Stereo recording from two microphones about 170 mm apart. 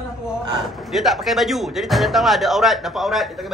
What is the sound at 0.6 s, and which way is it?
Speech, centre (ahead or behind).